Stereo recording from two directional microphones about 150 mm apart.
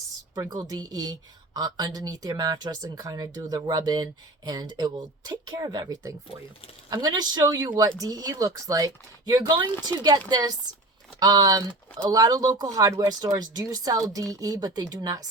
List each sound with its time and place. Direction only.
0.5 s speech: 25° right (ahead or behind)